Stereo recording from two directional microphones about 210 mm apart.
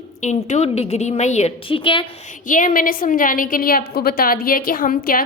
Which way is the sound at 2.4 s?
40° left (ahead or behind).